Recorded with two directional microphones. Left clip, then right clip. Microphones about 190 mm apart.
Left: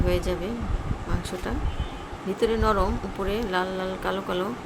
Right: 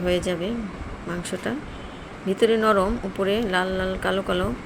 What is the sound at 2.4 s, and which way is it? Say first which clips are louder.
Speech: right 4 dB; 15° right (ahead or behind).